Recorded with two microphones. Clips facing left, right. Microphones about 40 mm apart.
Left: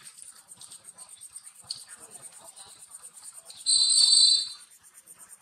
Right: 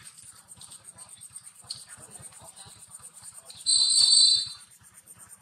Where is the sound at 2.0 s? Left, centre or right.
Centre.